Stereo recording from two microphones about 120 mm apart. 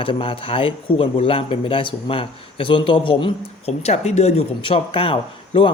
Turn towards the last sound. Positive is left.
turn(degrees=45)  # may be behind; listen again after turning